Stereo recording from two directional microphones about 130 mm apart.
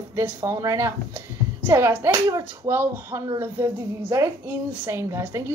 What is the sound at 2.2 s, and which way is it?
A woman's voice, 25° right (ahead or behind).